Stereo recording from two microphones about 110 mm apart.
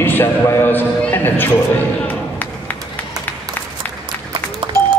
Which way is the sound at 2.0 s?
15° left (ahead or behind).